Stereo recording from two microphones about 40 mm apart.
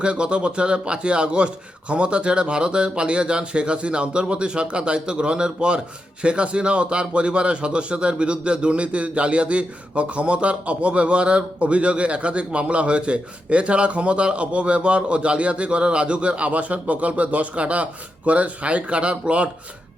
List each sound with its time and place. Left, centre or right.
0.0 s a man's voice: right